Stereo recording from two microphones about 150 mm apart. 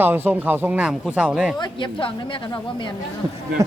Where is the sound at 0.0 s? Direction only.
15° right (ahead or behind).